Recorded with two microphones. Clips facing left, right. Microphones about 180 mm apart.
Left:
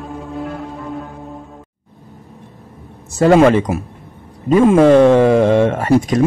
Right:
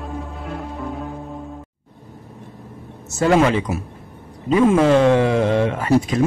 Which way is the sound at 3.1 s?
35° left (ahead or behind).